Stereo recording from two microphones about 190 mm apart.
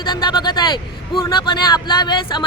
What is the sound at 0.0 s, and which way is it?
A man's voice, 25° left (ahead or behind).